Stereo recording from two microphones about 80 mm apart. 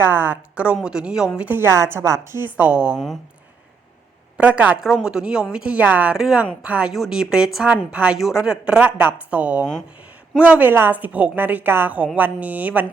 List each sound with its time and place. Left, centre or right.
0.0 s a woman's voice: right
0.5 s a woman's voice: centre
1.5 s a woman's voice: right
2.6 s a woman's voice: centre
4.4 s a woman's voice: centre
5.0 s a woman's voice: centre
6.1 s a woman's voice: centre
6.6 s a woman's voice: centre
6.9 s a woman's voice: centre